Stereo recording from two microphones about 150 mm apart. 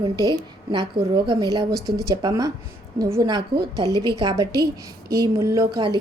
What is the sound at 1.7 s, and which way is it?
Speech, 90° right.